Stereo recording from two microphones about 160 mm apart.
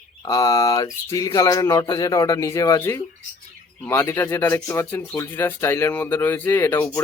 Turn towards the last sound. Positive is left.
turn(degrees=25)  # may be behind; listen again after turning